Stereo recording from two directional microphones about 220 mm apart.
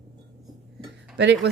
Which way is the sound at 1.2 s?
50° right (ahead or behind).